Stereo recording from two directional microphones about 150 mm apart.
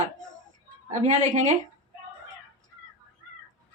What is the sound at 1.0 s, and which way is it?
Speech, 50° right (ahead or behind).